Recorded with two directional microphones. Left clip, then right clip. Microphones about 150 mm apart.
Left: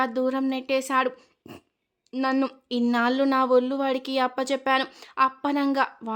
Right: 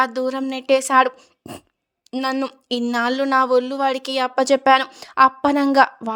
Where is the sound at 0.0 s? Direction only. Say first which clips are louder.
Right 4 dB; 40° right (ahead or behind).